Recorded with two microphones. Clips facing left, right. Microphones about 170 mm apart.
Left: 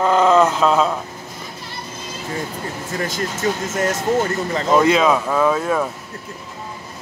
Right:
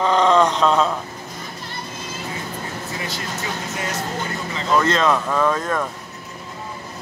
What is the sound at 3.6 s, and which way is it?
Speech, 45° left (ahead or behind).